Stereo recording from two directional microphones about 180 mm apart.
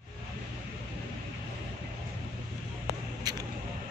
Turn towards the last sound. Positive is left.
turn(degrees=-20)  # may be behind; listen again after turning